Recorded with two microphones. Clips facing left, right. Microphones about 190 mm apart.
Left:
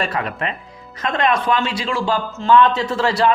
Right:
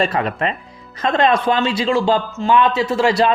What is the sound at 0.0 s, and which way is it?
A man's voice, 30° right (ahead or behind).